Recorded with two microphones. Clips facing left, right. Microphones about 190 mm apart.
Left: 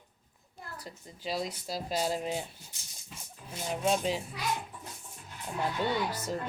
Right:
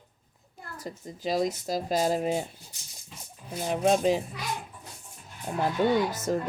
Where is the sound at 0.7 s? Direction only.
45° right (ahead or behind).